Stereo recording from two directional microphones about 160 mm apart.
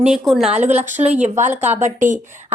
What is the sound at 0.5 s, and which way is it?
Speech, 45° right (ahead or behind).